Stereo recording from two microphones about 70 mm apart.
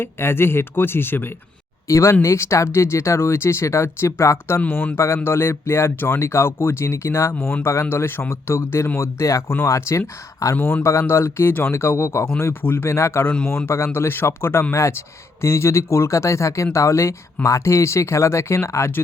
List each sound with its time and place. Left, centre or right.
0.0 s speech: left
1.9 s speech: left
7.3 s speech: left
7.6 s speech: left
10.6 s speech: left
11.0 s speech: left